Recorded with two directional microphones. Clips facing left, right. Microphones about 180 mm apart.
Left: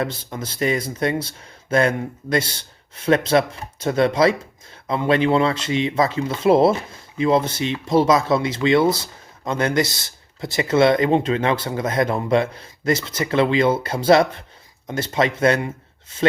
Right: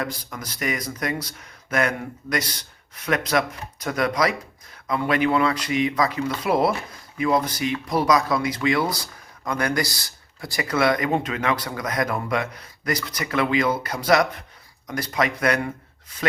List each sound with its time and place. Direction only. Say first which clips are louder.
0.0 s speech: left 4 dB; 25° left (ahead or behind)